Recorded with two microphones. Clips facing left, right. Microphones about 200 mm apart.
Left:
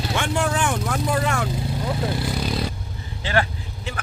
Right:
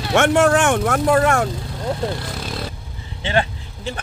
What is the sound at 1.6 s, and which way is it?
Vehicle, 5° left (ahead or behind).